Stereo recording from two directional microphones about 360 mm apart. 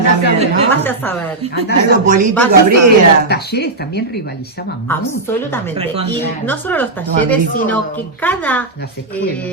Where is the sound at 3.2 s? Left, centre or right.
Left.